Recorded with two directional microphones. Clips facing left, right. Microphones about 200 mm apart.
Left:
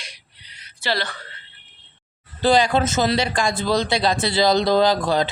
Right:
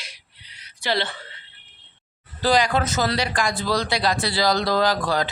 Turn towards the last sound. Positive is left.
turn(degrees=25)  # may be behind; listen again after turning